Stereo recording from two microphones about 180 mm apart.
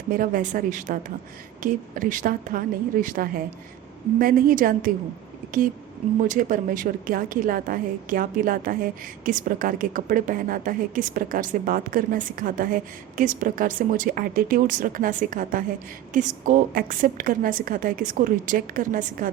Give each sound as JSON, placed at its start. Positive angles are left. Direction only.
{"t": 0.1, "sound": "a woman's voice", "side_deg": -50}